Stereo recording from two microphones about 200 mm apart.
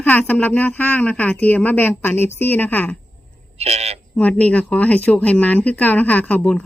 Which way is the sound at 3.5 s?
30° right (ahead or behind).